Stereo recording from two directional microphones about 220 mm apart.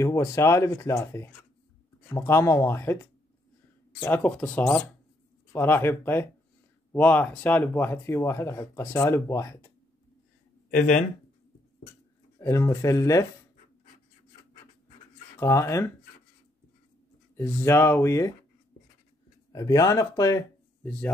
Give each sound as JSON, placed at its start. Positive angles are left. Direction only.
{"t": 0.0, "sound": "speech", "side_deg": 15}
{"t": 10.7, "sound": "speech", "side_deg": 35}
{"t": 12.4, "sound": "speech", "side_deg": 15}
{"t": 15.3, "sound": "speech", "side_deg": 10}
{"t": 17.4, "sound": "speech", "side_deg": 10}
{"t": 19.5, "sound": "speech", "side_deg": 15}